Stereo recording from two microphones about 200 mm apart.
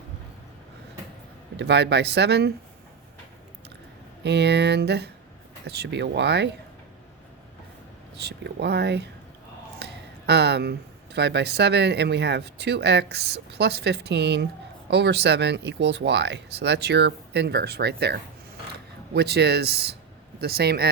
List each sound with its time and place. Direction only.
1.5 s speech: 60° right (ahead or behind)
4.2 s speech: 60° right (ahead or behind)
8.2 s speech: 55° right (ahead or behind)